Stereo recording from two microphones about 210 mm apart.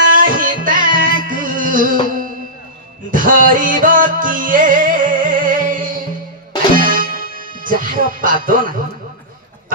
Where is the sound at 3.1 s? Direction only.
40° right (ahead or behind).